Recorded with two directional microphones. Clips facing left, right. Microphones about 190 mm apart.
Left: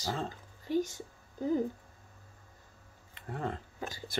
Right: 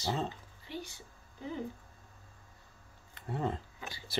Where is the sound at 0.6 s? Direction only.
45° left (ahead or behind).